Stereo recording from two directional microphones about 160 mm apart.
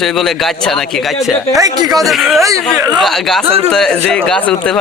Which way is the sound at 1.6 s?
20° right (ahead or behind).